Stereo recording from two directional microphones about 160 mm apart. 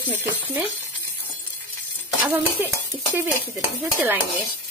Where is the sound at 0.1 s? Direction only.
10° right (ahead or behind).